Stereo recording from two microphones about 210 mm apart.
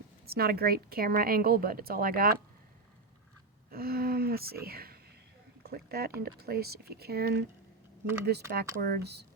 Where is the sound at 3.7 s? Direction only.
45° right (ahead or behind).